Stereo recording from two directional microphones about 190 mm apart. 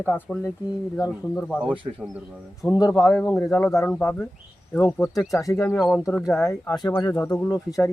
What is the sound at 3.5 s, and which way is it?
Speech, 5° left (ahead or behind).